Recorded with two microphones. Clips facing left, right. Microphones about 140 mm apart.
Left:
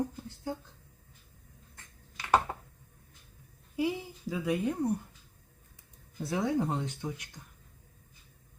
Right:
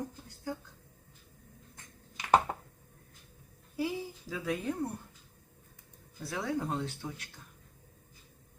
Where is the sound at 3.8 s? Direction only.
15° left (ahead or behind).